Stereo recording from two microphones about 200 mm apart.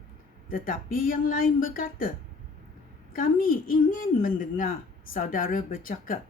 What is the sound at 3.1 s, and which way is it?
A woman's voice, 45° left (ahead or behind).